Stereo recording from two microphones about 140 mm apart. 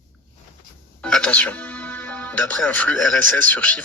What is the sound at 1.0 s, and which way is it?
Speech, 5° left (ahead or behind).